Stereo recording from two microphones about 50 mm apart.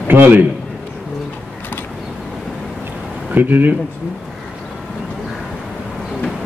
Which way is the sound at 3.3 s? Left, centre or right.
Right.